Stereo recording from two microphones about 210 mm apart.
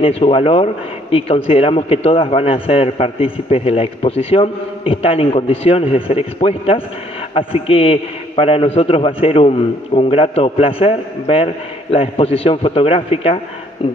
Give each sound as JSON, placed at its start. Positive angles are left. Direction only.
{"t": 0.0, "sound": "a man's voice", "side_deg": 25}